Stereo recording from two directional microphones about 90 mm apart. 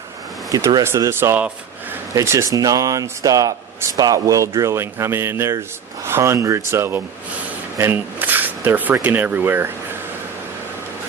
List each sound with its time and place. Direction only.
0.5 s speech: 40° right (ahead or behind)
0.9 s speech: 30° right (ahead or behind)